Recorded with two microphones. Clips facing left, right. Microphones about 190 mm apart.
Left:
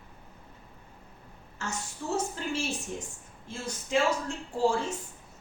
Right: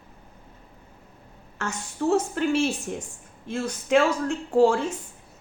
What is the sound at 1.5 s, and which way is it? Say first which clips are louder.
A woman's voice: right 5 dB; 65° right (ahead or behind).